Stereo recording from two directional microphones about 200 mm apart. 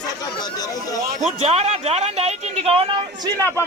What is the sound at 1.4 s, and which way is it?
Speech, 30° right (ahead or behind).